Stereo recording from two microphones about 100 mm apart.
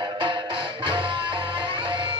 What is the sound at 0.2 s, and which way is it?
Music, 55° right (ahead or behind).